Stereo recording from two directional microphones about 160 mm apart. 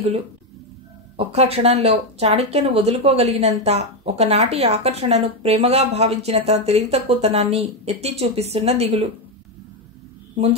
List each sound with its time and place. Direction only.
1.1 s speech: 40° right (ahead or behind)